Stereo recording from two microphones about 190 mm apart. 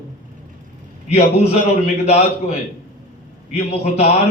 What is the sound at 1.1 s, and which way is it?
A man's voice, 35° left (ahead or behind).